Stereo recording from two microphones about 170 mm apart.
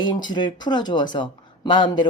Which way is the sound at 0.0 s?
25° left (ahead or behind).